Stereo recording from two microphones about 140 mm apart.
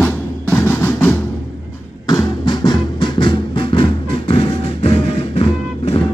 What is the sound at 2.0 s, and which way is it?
Music, 30° left (ahead or behind).